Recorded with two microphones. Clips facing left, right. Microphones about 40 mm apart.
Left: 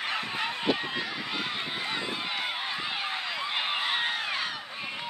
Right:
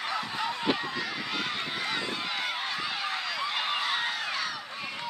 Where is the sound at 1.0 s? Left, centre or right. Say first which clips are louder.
Even; centre.